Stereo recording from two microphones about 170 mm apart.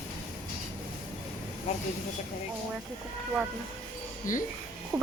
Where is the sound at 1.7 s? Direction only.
40° left (ahead or behind).